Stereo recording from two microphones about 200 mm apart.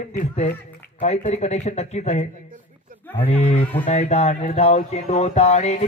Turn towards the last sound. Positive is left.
turn(degrees=35)  # may be behind; listen again after turning